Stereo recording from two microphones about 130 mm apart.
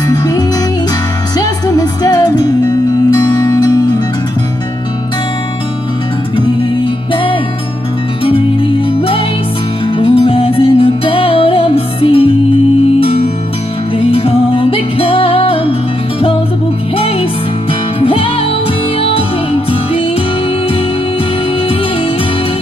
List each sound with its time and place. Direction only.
0.1 s music: 30° left (ahead or behind)
8.2 s music: 45° left (ahead or behind)
16.9 s music: 45° left (ahead or behind)